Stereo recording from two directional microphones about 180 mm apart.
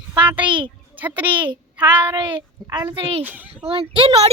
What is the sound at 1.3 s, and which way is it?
A child's voice, 30° right (ahead or behind).